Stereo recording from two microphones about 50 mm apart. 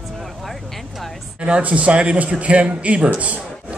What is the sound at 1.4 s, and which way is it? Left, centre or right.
A man's voice, right.